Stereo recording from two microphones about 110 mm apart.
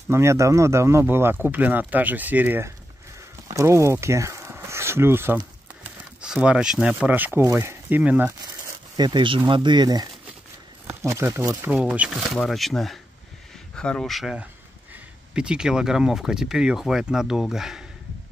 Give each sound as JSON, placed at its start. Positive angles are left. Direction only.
{"t": 0.1, "sound": "speech", "side_deg": -25}
{"t": 3.4, "sound": "speech", "side_deg": -25}
{"t": 6.2, "sound": "speech", "side_deg": -5}
{"t": 8.3, "sound": "a sound", "side_deg": -30}
{"t": 9.5, "sound": "speech", "side_deg": -45}
{"t": 11.0, "sound": "speech", "side_deg": -25}